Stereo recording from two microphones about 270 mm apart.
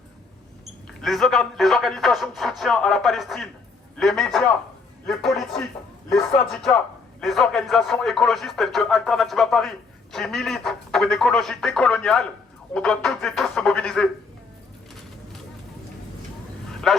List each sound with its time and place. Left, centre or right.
0.9 s speech: centre
16.9 s a man's voice: centre